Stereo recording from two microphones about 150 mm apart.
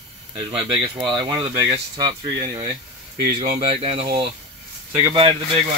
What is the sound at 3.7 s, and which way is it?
Speech, 40° right (ahead or behind).